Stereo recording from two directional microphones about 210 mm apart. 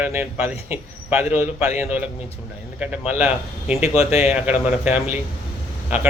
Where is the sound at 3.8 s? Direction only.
30° left (ahead or behind).